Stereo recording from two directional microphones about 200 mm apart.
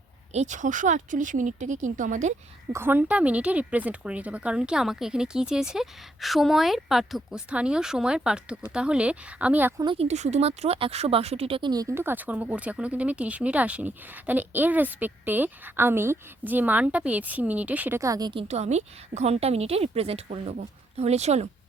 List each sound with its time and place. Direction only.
0.3 s a woman's voice: 40° right (ahead or behind)
2.7 s speech: 10° right (ahead or behind)
9.8 s a woman's voice: 30° right (ahead or behind)
11.9 s speech: 10° right (ahead or behind); by 21.5 s 35° right (ahead or behind)